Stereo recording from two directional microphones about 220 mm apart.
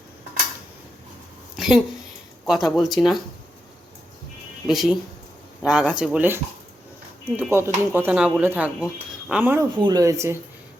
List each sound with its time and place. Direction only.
1.5 s a sound: centre (ahead or behind)
2.5 s speech: centre (ahead or behind)
4.7 s speech: centre (ahead or behind)
9.7 s speech: 20° right (ahead or behind)